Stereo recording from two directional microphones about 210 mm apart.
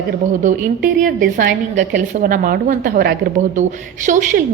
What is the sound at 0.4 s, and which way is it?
A woman's voice, 40° right (ahead or behind).